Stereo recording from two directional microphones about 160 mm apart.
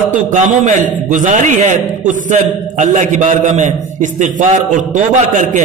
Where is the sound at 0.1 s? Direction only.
50° right (ahead or behind).